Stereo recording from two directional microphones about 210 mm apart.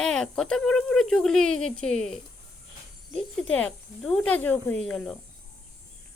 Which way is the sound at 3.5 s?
5° left (ahead or behind).